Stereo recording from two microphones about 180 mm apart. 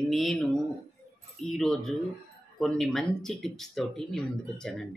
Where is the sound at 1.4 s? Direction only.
Centre (ahead or behind).